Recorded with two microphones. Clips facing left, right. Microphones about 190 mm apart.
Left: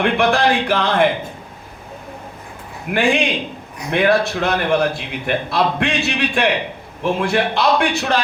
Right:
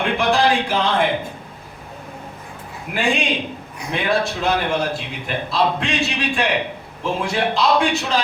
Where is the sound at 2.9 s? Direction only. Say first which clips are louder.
Left 4 dB; 60° left (ahead or behind).